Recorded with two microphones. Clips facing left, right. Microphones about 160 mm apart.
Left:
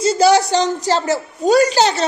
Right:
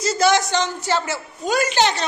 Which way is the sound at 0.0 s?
30° left (ahead or behind).